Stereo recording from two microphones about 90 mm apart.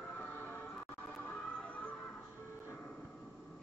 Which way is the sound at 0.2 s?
20° left (ahead or behind).